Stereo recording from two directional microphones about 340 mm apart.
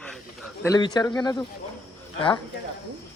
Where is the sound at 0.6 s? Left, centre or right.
Centre.